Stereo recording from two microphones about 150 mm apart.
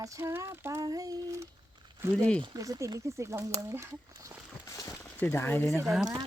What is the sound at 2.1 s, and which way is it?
Speech, 5° left (ahead or behind).